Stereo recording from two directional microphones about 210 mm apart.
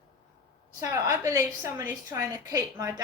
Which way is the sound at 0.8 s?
15° right (ahead or behind).